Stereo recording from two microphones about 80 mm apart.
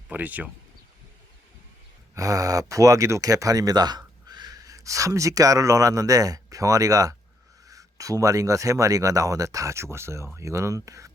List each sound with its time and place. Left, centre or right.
0.1 s speech: right
2.1 s speech: right